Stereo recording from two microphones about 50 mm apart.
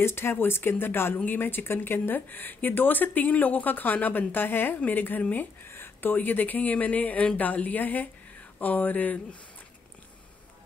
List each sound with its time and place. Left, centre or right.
0.0 s speech: left
4.7 s speech: left